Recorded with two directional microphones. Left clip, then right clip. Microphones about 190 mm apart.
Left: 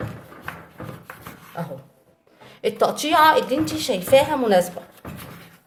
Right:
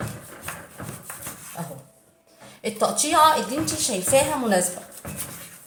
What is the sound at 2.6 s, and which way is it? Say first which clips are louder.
A woman's voice: left 3 dB; 45° left (ahead or behind).